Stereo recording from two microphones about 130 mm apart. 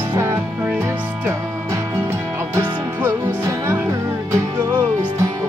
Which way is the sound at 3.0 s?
20° right (ahead or behind).